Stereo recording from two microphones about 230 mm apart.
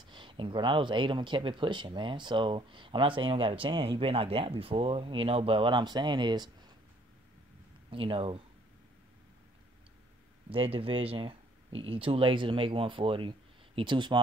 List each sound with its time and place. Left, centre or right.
0.0 s speech: right
7.9 s speech: right
10.5 s speech: right